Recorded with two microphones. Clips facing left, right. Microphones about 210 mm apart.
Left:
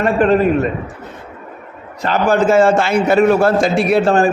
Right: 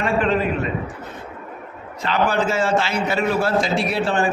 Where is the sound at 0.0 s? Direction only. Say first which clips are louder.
Left 7 dB; 45° left (ahead or behind).